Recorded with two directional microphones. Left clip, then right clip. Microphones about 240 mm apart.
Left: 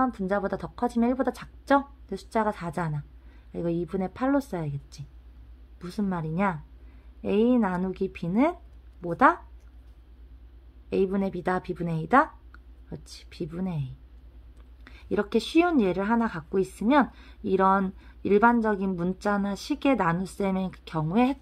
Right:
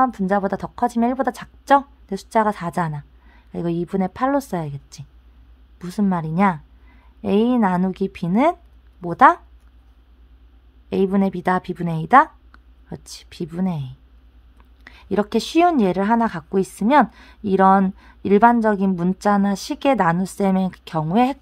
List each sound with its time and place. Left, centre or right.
0.0 s a woman's voice: right
10.9 s a woman's voice: right